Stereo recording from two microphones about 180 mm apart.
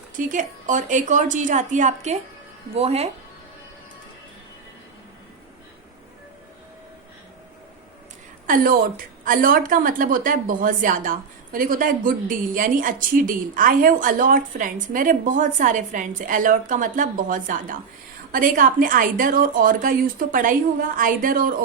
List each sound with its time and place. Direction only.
0.2 s a woman's voice: 45° right (ahead or behind)
8.4 s a woman's voice: 50° right (ahead or behind)